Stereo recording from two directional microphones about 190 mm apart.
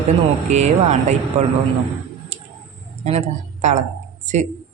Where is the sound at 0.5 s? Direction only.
35° right (ahead or behind).